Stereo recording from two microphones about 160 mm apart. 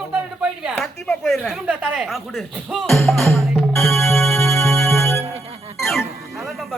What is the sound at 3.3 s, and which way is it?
Music, centre (ahead or behind).